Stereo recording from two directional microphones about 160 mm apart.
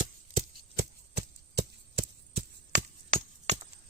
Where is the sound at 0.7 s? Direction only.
90° right.